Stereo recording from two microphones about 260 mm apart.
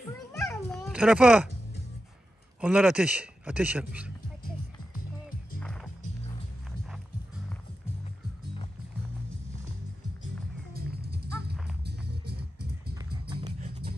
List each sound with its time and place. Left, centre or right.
0.3 s cat: centre
2.6 s a man's voice: centre
5.6 s music: centre
10.7 s music: right
13.3 s music: centre